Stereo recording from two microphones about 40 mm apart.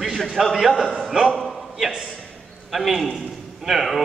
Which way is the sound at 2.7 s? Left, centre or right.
Centre.